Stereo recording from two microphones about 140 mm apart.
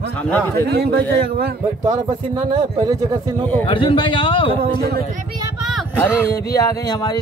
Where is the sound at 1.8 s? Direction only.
30° right (ahead or behind).